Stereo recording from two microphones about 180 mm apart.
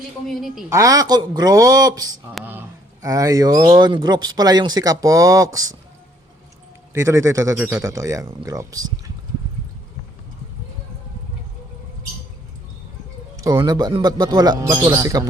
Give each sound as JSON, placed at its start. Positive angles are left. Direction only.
{"t": 0.3, "sound": "a woman's voice", "side_deg": 0}
{"t": 0.7, "sound": "speech", "side_deg": -20}
{"t": 6.9, "sound": "speech", "side_deg": -15}
{"t": 13.3, "sound": "speech", "side_deg": -20}